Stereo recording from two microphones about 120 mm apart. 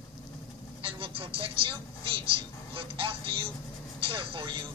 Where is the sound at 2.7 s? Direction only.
45° right (ahead or behind).